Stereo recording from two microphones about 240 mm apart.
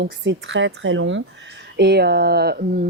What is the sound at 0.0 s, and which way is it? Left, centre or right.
Speech, right.